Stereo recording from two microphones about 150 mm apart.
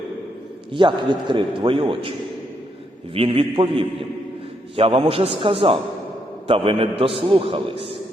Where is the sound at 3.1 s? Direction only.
40° right (ahead or behind).